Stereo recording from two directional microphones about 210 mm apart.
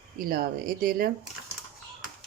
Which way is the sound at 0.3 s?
45° right (ahead or behind).